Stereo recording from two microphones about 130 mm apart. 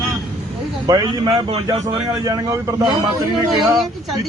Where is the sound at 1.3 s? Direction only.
45° right (ahead or behind).